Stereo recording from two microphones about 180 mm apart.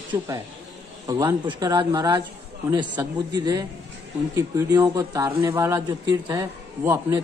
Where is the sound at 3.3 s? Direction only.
20° right (ahead or behind).